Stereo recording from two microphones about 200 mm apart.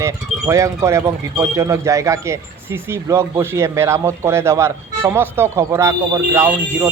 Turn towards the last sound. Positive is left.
turn(degrees=-10)  # may be behind; listen again after turning